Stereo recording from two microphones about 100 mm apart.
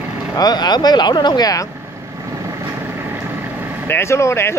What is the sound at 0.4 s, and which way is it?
Speech, 45° left (ahead or behind).